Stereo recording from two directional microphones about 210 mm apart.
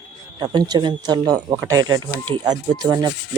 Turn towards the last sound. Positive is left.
turn(degrees=-20)  # may be behind; listen again after turning